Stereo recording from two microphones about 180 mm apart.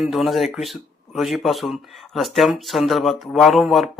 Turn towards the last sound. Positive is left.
turn(degrees=0)  # may be behind; listen again after turning